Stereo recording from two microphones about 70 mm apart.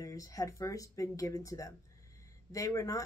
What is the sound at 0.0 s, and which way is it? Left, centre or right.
Speech, left.